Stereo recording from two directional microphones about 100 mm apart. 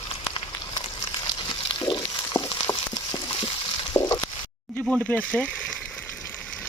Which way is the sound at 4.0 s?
25° left (ahead or behind).